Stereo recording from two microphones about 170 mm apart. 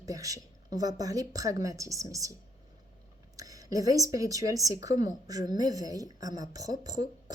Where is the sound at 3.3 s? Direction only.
20° right (ahead or behind).